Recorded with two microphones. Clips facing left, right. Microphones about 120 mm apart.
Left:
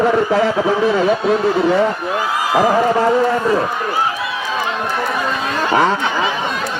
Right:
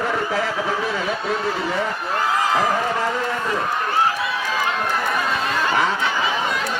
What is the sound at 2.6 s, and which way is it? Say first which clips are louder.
Speech: left 7 dB; 40° left (ahead or behind).